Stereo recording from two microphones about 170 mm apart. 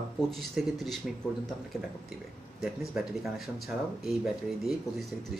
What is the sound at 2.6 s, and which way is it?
Speech, 5° right (ahead or behind).